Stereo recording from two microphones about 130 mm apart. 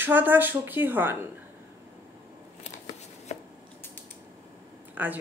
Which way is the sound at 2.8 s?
60° left (ahead or behind).